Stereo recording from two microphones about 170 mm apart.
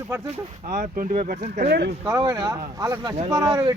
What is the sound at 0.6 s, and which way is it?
Speech, 50° right (ahead or behind).